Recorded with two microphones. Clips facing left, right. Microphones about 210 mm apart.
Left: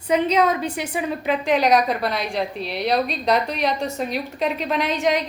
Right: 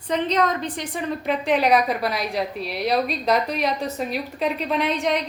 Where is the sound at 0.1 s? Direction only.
10° left (ahead or behind).